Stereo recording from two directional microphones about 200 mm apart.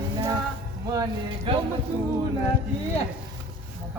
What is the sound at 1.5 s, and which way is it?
Speech, 25° right (ahead or behind).